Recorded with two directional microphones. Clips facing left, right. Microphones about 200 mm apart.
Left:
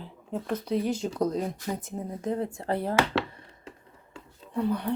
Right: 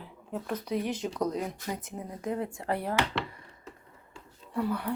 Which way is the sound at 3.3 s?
30° left (ahead or behind).